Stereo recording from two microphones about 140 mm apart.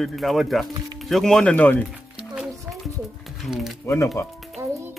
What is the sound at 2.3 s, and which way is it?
Music, 5° right (ahead or behind).